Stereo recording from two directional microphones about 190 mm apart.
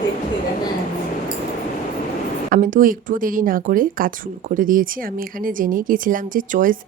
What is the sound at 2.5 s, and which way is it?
Speech, 45° right (ahead or behind).